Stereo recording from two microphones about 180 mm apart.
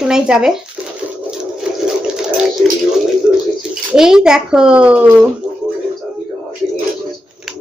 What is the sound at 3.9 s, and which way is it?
A woman's voice, 5° right (ahead or behind).